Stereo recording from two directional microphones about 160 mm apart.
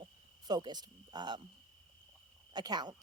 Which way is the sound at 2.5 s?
25° right (ahead or behind).